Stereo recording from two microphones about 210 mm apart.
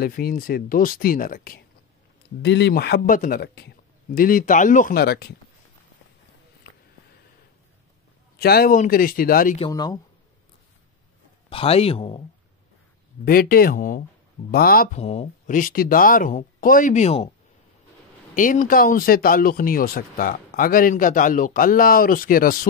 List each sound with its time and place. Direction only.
0.0 s speech: 45° left (ahead or behind)
2.4 s speech: 55° left (ahead or behind)
8.4 s speech: 45° left (ahead or behind)
9.6 s speech: 20° left (ahead or behind)
11.4 s speech: 25° left (ahead or behind)
13.2 s speech: 45° left (ahead or behind)
15.0 s speech: 30° left (ahead or behind)
18.3 s speech: 40° left (ahead or behind)